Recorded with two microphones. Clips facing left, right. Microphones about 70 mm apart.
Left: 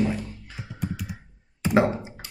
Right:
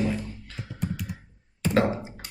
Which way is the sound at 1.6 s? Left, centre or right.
Centre.